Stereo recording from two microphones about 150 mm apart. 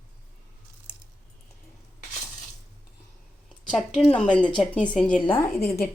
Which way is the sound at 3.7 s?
5° left (ahead or behind).